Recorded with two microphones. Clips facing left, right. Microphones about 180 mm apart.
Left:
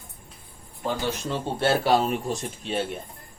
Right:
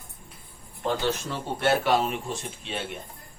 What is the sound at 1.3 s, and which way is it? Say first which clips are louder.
Speech: left 3 dB; 30° left (ahead or behind).